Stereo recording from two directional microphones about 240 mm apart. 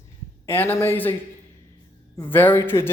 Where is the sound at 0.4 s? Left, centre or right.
Centre.